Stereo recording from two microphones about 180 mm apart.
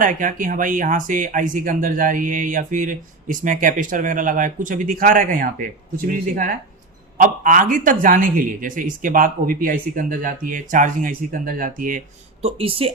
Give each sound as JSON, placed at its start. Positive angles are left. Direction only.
{"t": 0.0, "sound": "speech", "side_deg": -45}